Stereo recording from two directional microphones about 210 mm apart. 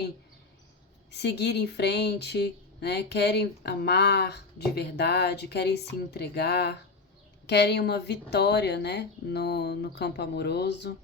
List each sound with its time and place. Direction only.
1.1 s speech: 50° left (ahead or behind)